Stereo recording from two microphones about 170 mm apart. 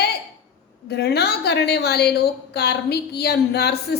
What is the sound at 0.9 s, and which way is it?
A woman's voice, 75° left (ahead or behind).